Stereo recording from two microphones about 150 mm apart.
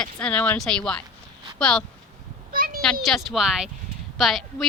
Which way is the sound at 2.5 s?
70° right (ahead or behind).